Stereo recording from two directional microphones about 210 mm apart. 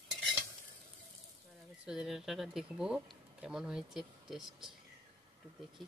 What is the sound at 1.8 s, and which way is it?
Speech, 5° right (ahead or behind).